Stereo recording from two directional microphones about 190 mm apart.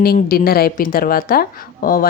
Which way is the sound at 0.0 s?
50° left (ahead or behind).